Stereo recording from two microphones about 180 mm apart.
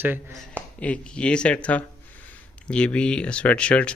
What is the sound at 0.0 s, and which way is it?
Speech, 10° right (ahead or behind).